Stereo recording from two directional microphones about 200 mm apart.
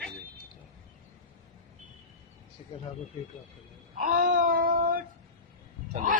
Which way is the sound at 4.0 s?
40° right (ahead or behind).